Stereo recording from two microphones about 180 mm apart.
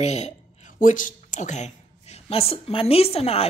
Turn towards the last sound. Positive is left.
turn(degrees=35)  # may be behind; listen again after turning